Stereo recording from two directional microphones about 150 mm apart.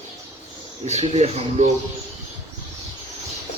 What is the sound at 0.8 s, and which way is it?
Speech, 45° right (ahead or behind).